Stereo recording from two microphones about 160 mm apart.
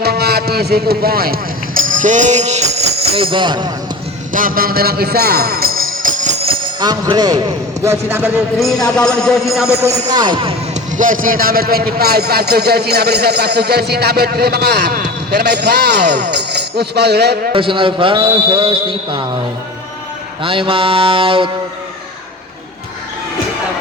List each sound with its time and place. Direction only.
0.0 s music: 85° right; by 3.7 s 30° right (ahead or behind)
4.3 s music: 60° right (ahead or behind); by 7.4 s 25° right (ahead or behind)
7.9 s a man's voice: 15° right (ahead or behind)
8.5 s music: centre (ahead or behind)
10.1 s speech: 25° right (ahead or behind)
10.9 s a man's voice: 55° right (ahead or behind); by 17.3 s 90° right
17.5 s a man's voice: 35° right (ahead or behind)
20.4 s a man's voice: 35° right (ahead or behind)